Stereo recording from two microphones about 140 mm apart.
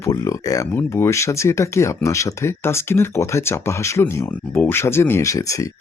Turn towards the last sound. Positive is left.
turn(degrees=25)  # may be behind; listen again after turning